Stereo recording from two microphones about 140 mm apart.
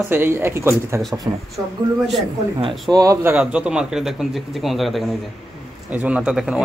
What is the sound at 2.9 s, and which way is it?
Speech, 25° right (ahead or behind).